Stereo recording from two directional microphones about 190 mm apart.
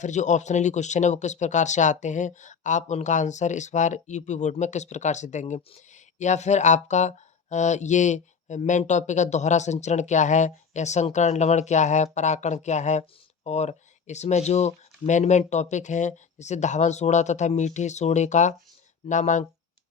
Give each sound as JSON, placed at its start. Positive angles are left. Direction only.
{"t": 0.0, "sound": "speech", "side_deg": 40}